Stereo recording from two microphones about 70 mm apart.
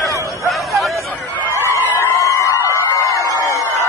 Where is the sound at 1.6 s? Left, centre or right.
Left.